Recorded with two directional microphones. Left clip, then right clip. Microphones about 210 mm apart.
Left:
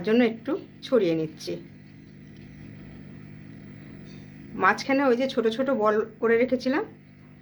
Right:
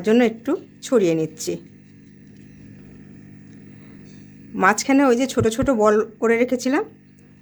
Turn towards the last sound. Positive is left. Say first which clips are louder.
# right 3 dB
turn(degrees=-60)  # may be behind; listen again after turning